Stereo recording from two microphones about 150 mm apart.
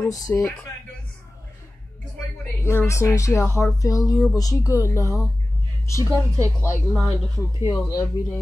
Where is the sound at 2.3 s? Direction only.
15° left (ahead or behind).